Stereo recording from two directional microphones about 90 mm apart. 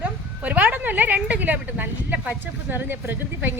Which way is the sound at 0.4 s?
15° right (ahead or behind).